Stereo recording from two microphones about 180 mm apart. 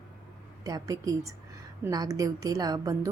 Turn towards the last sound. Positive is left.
turn(degrees=-20)  # may be behind; listen again after turning